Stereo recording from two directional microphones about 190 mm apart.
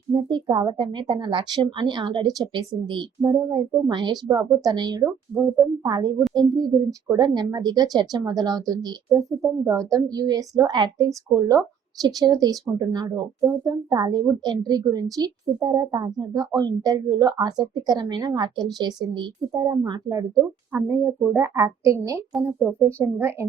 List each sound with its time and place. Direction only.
0.1 s a woman's voice: 25° right (ahead or behind)